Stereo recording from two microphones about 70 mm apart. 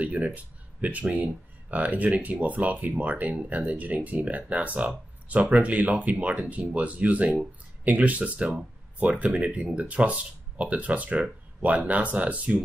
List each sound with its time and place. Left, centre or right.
0.0 s speech: centre